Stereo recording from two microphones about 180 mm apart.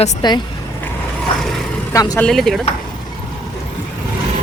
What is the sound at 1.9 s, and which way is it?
Speech, 20° left (ahead or behind).